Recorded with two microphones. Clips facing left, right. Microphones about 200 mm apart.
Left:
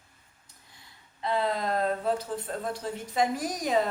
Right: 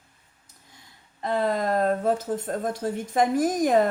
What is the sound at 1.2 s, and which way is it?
Speech, 50° right (ahead or behind).